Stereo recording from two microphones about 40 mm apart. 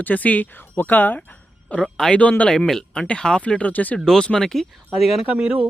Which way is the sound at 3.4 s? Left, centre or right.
Left.